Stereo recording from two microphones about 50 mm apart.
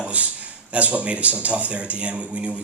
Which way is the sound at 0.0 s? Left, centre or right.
Right.